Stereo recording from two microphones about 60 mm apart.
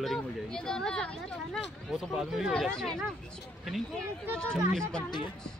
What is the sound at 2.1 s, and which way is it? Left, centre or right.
Speech, centre.